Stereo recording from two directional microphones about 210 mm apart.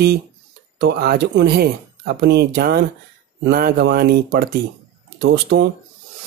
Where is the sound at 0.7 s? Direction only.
50° right (ahead or behind).